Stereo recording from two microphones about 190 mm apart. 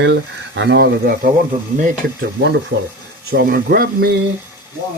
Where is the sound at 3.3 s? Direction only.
50° right (ahead or behind).